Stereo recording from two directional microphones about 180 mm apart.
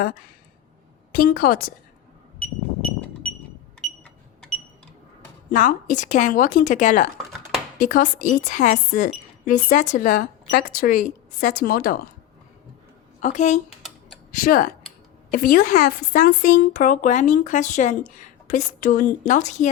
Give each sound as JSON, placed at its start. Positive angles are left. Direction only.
{"t": 1.1, "sound": "speech", "side_deg": 50}
{"t": 3.8, "sound": "a sound", "side_deg": 5}
{"t": 5.5, "sound": "speech", "side_deg": 45}
{"t": 13.2, "sound": "speech", "side_deg": 40}